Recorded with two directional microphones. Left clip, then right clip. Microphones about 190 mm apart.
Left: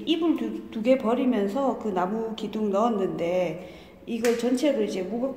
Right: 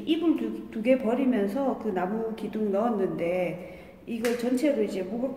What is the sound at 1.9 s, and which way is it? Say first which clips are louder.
Speech: left 2 dB; 20° right (ahead or behind).